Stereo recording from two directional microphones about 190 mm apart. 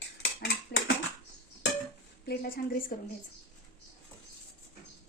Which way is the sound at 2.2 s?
55° left (ahead or behind).